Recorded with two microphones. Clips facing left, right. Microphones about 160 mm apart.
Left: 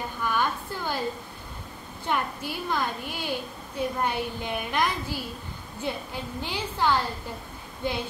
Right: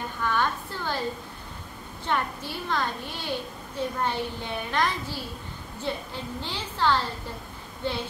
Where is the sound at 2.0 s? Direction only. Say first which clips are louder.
Even; 10° left (ahead or behind).